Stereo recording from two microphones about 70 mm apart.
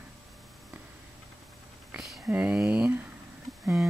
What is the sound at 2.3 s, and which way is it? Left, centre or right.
Speech, right.